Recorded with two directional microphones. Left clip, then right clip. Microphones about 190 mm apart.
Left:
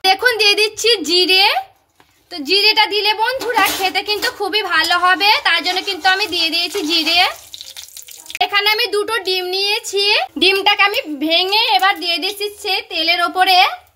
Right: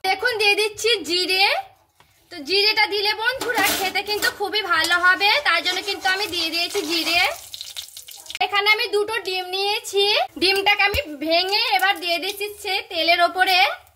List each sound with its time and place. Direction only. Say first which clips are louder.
0.0 s a sound: left 6 dB; 55° left (ahead or behind)
2.4 s a woman's voice: left 5 dB; 55° left (ahead or behind)
8.4 s a woman's voice: left 4 dB; 60° left (ahead or behind)